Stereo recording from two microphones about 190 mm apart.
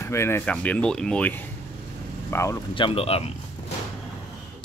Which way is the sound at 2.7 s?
30° left (ahead or behind).